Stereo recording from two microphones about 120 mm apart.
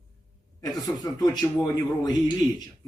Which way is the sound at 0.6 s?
30° left (ahead or behind).